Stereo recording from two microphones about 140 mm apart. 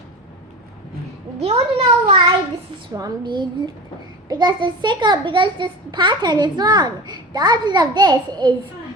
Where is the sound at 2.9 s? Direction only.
30° right (ahead or behind).